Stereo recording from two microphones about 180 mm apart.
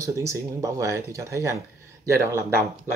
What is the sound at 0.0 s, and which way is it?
Speech, 15° right (ahead or behind).